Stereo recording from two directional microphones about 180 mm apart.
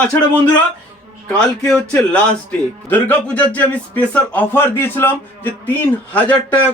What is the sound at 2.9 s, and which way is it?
A man's voice, 10° left (ahead or behind).